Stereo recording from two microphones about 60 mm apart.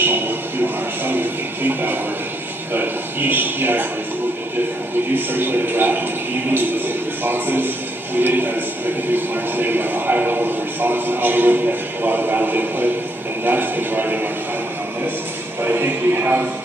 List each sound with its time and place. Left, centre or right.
0.0 s music: right
2.7 s a man's voice: right
5.1 s a man's voice: right
7.2 s a man's voice: right
15.6 s speech: right